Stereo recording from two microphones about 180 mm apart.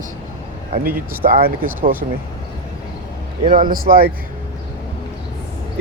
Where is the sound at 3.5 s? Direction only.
50° right (ahead or behind).